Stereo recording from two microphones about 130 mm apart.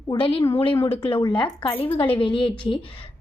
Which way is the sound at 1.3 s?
35° left (ahead or behind).